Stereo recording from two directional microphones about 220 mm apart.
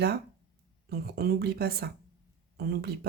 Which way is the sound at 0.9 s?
45° right (ahead or behind).